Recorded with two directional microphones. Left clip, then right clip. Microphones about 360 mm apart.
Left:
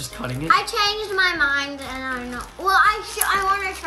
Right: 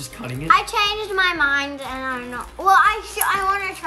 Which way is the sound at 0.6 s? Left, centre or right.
Right.